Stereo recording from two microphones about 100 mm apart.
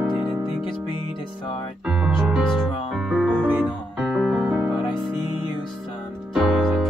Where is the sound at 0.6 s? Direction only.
55° left (ahead or behind).